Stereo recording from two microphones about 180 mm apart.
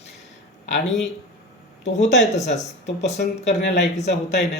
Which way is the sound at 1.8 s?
40° left (ahead or behind).